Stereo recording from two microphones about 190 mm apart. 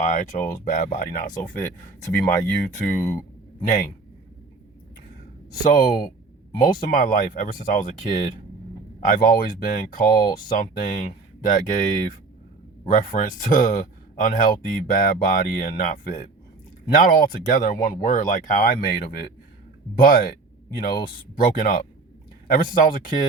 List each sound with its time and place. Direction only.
0.0 s speech: 35° left (ahead or behind)
2.6 s speech: 40° left (ahead or behind)
5.6 s speech: 45° left (ahead or behind)